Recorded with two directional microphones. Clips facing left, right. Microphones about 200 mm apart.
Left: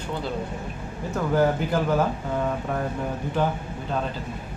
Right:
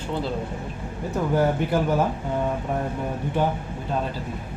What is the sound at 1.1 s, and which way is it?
Speech, 15° right (ahead or behind).